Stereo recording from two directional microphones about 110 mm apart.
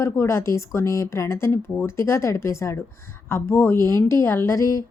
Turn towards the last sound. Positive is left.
turn(degrees=25)  # may be behind; listen again after turning